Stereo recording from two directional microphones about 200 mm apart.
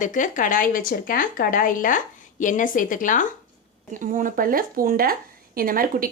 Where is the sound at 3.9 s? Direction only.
40° right (ahead or behind).